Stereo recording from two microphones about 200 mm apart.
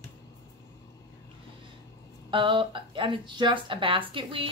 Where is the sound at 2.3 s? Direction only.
25° right (ahead or behind).